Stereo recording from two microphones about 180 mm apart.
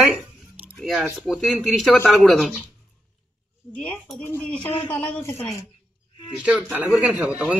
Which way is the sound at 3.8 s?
5° left (ahead or behind).